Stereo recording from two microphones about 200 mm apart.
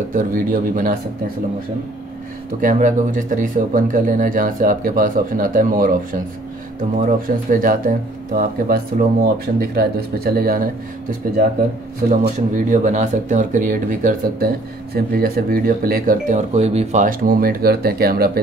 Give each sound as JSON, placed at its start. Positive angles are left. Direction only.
{"t": 0.1, "sound": "speech", "side_deg": -40}
{"t": 2.6, "sound": "speech", "side_deg": -40}